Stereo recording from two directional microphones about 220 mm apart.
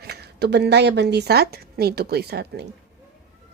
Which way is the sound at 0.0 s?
45° right (ahead or behind).